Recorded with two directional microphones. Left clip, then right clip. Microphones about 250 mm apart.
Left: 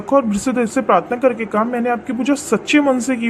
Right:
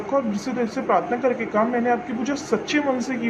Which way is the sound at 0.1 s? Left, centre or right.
Left.